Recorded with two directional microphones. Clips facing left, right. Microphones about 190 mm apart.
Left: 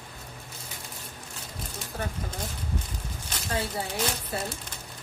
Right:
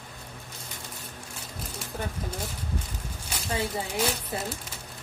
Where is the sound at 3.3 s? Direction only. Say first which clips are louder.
Right 1 dB; 10° right (ahead or behind).